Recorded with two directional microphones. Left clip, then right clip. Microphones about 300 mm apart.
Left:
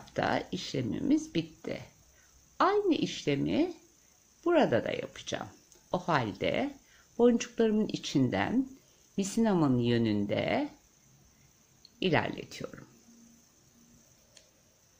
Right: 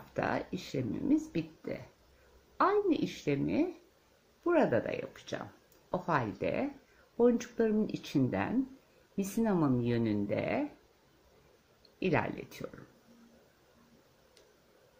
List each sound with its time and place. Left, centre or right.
0.1 s speech: centre
12.0 s speech: centre